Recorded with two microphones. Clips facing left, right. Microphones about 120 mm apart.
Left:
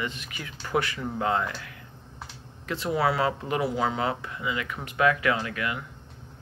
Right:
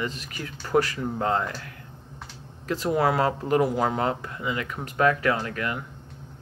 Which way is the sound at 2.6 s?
45° right (ahead or behind).